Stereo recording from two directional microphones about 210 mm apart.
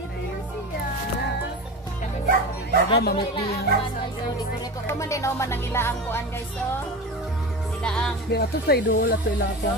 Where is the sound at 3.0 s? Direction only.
50° left (ahead or behind).